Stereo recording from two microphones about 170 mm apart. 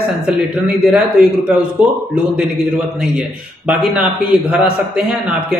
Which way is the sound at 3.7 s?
5° right (ahead or behind).